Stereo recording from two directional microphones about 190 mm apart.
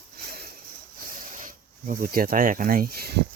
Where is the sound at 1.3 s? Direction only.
45° right (ahead or behind).